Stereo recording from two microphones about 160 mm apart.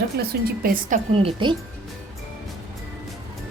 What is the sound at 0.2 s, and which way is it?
Speech, 65° right (ahead or behind).